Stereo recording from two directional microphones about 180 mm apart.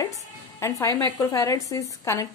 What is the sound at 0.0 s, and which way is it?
Music, 20° left (ahead or behind).